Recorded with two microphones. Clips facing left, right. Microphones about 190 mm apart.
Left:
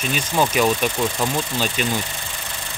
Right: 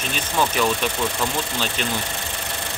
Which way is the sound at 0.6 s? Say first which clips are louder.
Left 3 dB; 15° left (ahead or behind).